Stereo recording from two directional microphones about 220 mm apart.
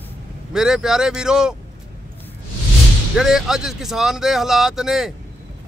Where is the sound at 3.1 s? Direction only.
Centre (ahead or behind).